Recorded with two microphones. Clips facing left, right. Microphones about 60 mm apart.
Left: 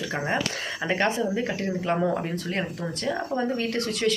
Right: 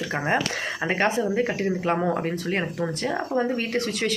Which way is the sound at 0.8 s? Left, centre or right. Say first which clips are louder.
Right 1 dB; right.